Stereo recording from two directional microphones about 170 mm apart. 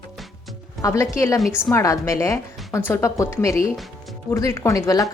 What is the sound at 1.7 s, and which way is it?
A woman's voice, 20° left (ahead or behind).